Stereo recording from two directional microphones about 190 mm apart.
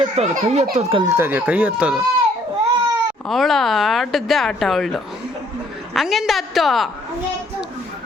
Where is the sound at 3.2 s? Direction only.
Centre (ahead or behind).